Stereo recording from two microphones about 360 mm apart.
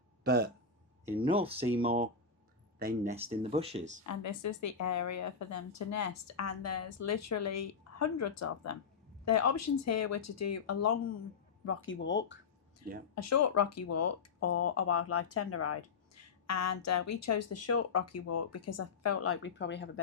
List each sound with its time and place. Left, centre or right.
0.3 s speech: right
1.0 s speech: centre
4.0 s a woman's voice: left
13.1 s speech: left